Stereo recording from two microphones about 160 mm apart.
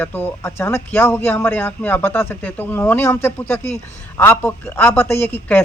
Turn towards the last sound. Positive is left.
turn(degrees=15)  # may be behind; listen again after turning